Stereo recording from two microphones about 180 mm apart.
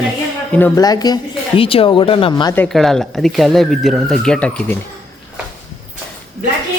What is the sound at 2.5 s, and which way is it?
Speech, 5° left (ahead or behind).